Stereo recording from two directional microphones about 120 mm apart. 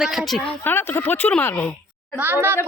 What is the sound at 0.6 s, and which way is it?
Speech, 20° left (ahead or behind).